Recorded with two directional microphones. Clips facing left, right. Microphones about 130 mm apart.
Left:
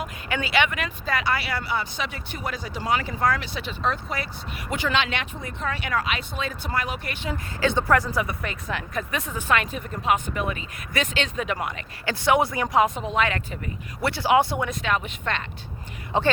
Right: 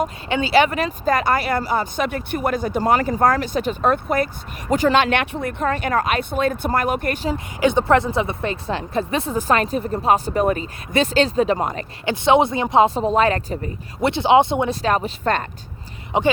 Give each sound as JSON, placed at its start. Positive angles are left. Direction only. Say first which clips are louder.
{"t": 0.3, "sound": "speech", "louder": "right 7 dB", "side_deg": -25}
{"t": 7.3, "sound": "a woman's voice", "louder": "right 4 dB", "side_deg": -20}
{"t": 12.0, "sound": "speech", "louder": "right 5 dB", "side_deg": -20}
{"t": 14.0, "sound": "a woman's voice", "louder": "right 5 dB", "side_deg": -20}
{"t": 16.1, "sound": "speech", "louder": "right 4 dB", "side_deg": -15}